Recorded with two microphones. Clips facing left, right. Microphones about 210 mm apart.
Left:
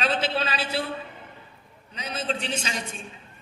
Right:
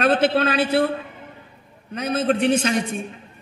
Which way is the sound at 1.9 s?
55° right (ahead or behind).